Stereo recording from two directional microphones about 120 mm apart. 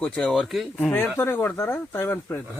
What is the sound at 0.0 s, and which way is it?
Speech, 5° left (ahead or behind).